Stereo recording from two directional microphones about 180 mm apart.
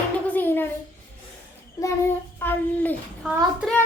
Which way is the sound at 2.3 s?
10° left (ahead or behind).